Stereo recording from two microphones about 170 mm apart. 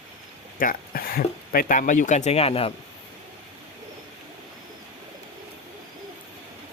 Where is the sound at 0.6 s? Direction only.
60° left (ahead or behind); by 2.7 s 35° left (ahead or behind).